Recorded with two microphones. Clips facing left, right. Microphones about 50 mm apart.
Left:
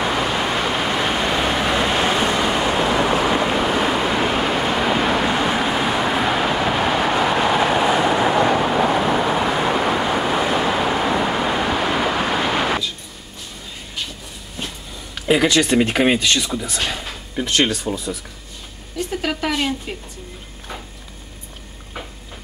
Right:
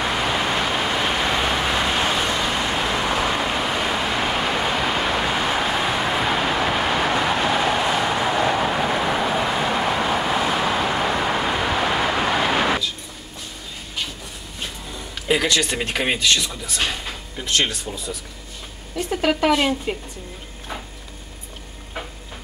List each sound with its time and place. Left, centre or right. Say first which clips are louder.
0.0 s vehicle: left 2 dB; centre
15.1 s speech: left 4 dB; centre
19.2 s speech: right 5 dB; centre